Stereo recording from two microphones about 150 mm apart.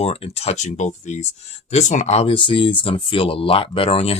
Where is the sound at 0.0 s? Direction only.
40° left (ahead or behind).